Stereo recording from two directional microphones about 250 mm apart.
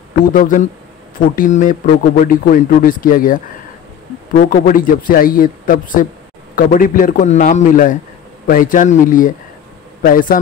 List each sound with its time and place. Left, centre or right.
0.3 s speech: left